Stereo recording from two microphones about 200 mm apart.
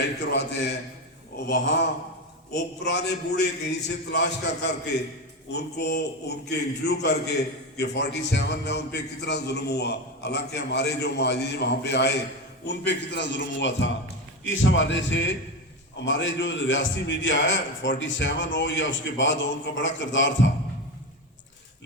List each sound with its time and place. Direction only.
0.2 s a man's voice: 55° left (ahead or behind)
2.8 s a man's voice: 55° left (ahead or behind)